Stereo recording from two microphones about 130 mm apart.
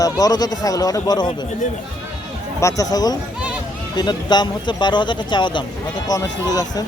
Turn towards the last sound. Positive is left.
turn(degrees=30)  # may be behind; listen again after turning